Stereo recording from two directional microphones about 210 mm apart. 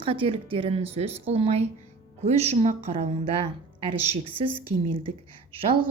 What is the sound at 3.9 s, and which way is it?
A woman's voice, 25° right (ahead or behind).